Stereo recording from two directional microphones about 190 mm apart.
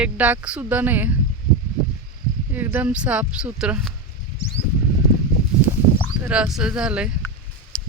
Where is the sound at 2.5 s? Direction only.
10° right (ahead or behind).